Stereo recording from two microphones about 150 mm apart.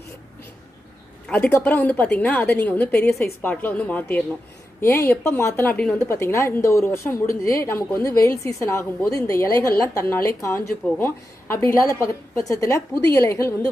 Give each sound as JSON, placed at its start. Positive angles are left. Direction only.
{"t": 1.3, "sound": "a woman's voice", "side_deg": 10}